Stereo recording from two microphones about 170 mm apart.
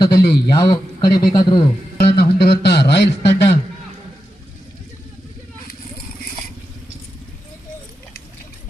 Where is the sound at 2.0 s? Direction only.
70° left (ahead or behind).